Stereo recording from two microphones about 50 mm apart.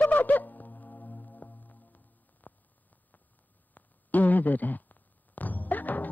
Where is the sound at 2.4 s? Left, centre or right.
Left.